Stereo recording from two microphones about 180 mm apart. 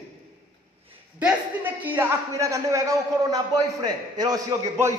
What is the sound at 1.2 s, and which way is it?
A man's voice, 10° right (ahead or behind).